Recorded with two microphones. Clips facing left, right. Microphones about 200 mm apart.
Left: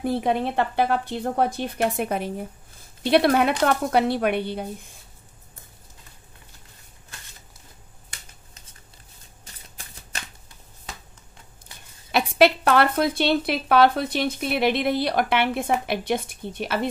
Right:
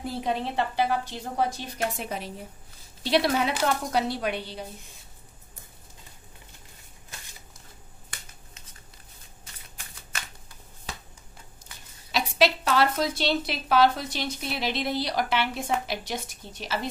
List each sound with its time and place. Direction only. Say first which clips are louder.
0.0 s speech: left 6 dB; 55° left (ahead or behind)
12.1 s speech: left 6 dB; 55° left (ahead or behind)